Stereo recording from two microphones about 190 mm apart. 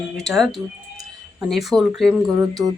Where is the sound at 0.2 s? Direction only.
Centre (ahead or behind).